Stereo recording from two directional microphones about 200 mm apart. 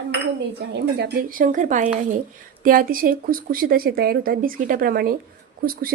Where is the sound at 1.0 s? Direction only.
45° right (ahead or behind).